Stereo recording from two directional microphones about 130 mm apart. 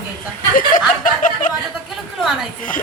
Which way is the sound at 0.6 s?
90° left.